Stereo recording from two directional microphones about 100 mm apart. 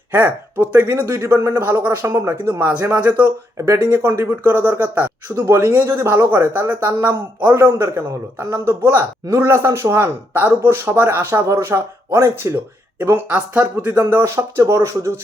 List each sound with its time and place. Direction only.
0.1 s speech: 20° right (ahead or behind)